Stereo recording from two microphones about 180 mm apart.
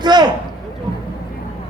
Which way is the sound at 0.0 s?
25° right (ahead or behind).